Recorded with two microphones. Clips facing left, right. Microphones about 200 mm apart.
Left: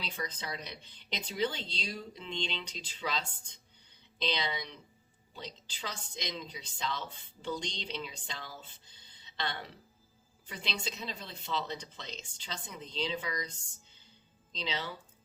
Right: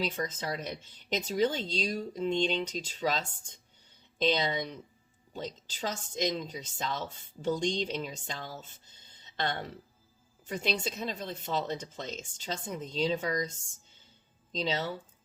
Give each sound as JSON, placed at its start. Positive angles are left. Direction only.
{"t": 0.0, "sound": "a woman's voice", "side_deg": -45}